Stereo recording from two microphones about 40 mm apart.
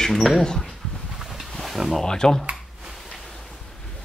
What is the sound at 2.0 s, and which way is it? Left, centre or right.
Speech, centre.